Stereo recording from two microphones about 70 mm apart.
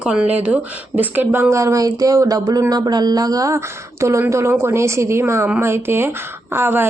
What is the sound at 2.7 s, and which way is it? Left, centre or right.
A woman's voice, right.